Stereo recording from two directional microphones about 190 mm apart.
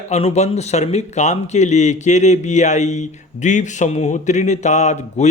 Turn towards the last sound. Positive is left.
turn(degrees=35)  # may be behind; listen again after turning